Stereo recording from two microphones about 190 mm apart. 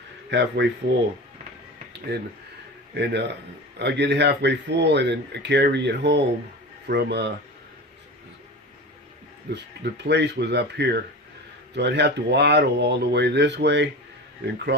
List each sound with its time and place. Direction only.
0.3 s speech: 65° right (ahead or behind)
2.9 s speech: 60° right (ahead or behind)
9.5 s speech: 60° right (ahead or behind)